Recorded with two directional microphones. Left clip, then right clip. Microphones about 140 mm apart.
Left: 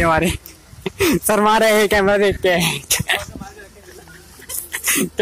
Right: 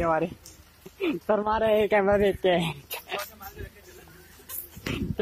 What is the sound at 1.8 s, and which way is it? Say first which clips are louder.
Speech: left 7 dB; centre (ahead or behind).